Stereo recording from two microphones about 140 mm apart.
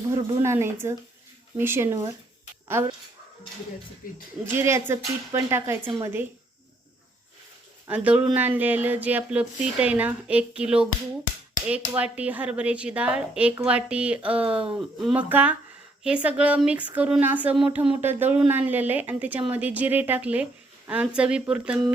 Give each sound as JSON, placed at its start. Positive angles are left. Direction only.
{"t": 0.1, "sound": "speech", "side_deg": -20}
{"t": 4.0, "sound": "speech", "side_deg": 90}
{"t": 4.5, "sound": "speech", "side_deg": -15}
{"t": 7.9, "sound": "speech", "side_deg": -10}
{"t": 12.1, "sound": "speech", "side_deg": -10}
{"t": 15.3, "sound": "speech", "side_deg": -15}